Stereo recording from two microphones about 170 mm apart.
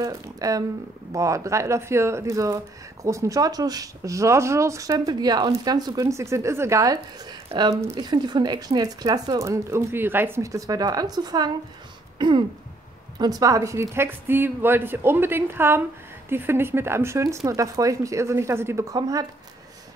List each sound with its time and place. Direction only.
0.0 s speech: 20° right (ahead or behind)